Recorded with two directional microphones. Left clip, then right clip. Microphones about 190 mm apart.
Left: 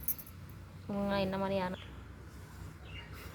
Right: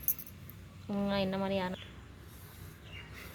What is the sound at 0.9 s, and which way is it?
Speech, 15° right (ahead or behind).